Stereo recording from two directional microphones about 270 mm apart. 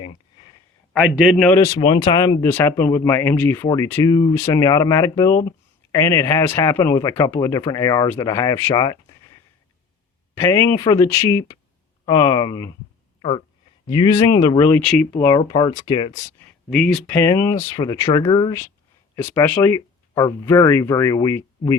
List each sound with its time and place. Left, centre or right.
0.9 s speech: centre
10.3 s speech: centre
13.8 s speech: centre
15.1 s speech: centre
16.6 s speech: centre